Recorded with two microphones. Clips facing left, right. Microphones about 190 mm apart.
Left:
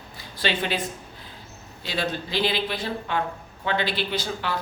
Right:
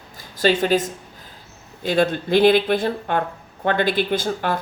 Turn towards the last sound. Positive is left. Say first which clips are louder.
# right 6 dB
turn(degrees=-50)  # may be behind; listen again after turning